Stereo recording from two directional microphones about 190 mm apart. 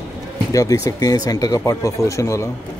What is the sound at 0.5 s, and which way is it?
Speech, 20° left (ahead or behind).